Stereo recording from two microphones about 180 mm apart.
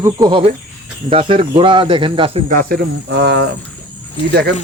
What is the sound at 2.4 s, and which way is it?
Speech, 55° right (ahead or behind).